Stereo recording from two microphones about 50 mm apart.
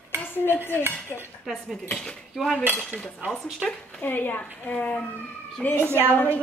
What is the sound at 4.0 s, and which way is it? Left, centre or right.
Speech, left.